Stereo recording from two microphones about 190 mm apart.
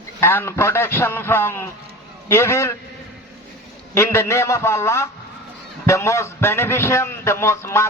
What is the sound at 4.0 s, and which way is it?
A man's voice, 15° left (ahead or behind).